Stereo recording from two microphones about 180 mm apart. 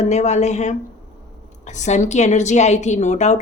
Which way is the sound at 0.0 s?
40° left (ahead or behind).